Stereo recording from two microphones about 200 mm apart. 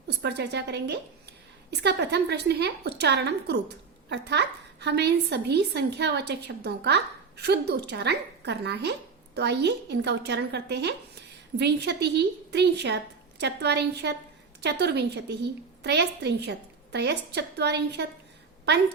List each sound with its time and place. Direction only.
0.2 s a woman's voice: 55° right (ahead or behind)